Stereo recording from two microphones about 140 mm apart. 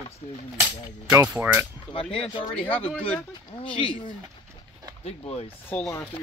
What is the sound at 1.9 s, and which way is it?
Speech, 40° left (ahead or behind).